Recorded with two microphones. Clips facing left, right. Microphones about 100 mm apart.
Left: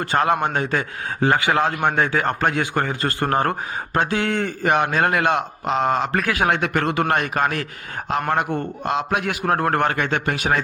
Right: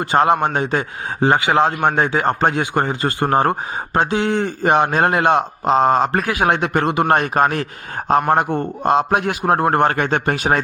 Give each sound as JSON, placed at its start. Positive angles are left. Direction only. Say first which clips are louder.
{"t": 0.0, "sound": "a man's voice", "louder": "right 4 dB", "side_deg": -25}
{"t": 7.1, "sound": "speech", "louder": "right 5 dB", "side_deg": -35}